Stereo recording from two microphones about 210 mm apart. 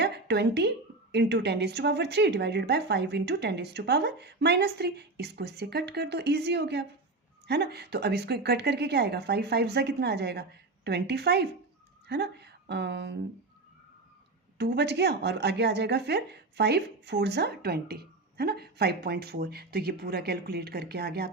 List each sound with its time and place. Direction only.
0.0 s a sound: 55° right (ahead or behind)
1.1 s a woman's voice: 55° right (ahead or behind)
14.6 s a woman's voice: 55° right (ahead or behind)